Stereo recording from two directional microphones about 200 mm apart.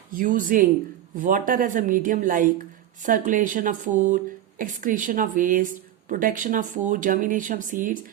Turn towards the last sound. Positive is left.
turn(degrees=-40)  # may be behind; listen again after turning